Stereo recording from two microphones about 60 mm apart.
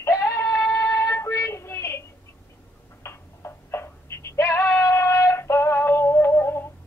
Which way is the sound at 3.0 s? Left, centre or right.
Left.